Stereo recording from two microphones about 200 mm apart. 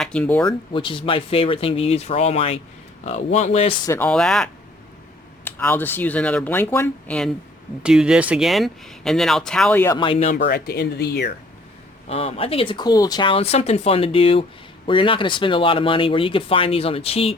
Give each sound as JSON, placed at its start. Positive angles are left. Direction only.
{"t": 0.0, "sound": "speech", "side_deg": 5}
{"t": 0.4, "sound": "speech", "side_deg": 25}
{"t": 3.8, "sound": "speech", "side_deg": 10}
{"t": 5.5, "sound": "speech", "side_deg": 10}
{"t": 10.0, "sound": "speech", "side_deg": 30}
{"t": 10.3, "sound": "speech", "side_deg": 50}
{"t": 12.0, "sound": "speech", "side_deg": 30}